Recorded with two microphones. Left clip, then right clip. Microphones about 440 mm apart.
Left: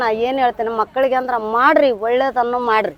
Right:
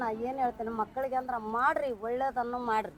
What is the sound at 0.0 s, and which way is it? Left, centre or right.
Speech, left.